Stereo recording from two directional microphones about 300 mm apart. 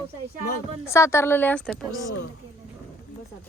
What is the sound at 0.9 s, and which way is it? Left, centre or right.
Speech, centre.